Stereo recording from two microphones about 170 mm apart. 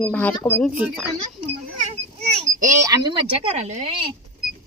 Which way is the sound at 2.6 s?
20° right (ahead or behind).